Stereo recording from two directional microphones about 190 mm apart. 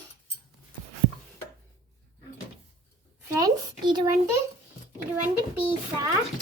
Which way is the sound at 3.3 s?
20° right (ahead or behind).